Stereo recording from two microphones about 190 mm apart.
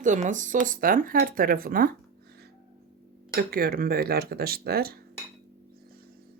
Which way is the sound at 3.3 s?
55° right (ahead or behind).